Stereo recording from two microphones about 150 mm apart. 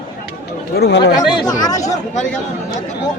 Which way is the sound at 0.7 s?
90° left.